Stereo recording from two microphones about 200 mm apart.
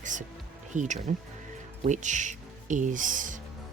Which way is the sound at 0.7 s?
35° right (ahead or behind).